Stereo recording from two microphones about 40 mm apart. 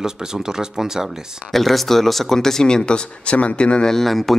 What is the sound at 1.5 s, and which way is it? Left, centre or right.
Speech, centre.